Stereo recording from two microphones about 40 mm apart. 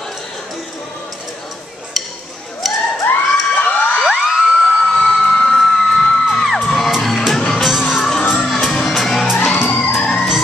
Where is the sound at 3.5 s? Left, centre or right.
Left.